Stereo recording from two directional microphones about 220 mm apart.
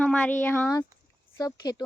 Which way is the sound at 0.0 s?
5° left (ahead or behind).